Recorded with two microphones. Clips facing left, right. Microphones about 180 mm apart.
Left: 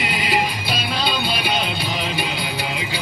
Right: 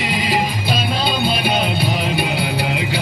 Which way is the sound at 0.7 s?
45° right (ahead or behind).